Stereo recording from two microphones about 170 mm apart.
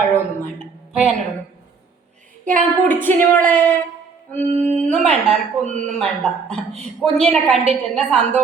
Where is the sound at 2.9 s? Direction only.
10° left (ahead or behind).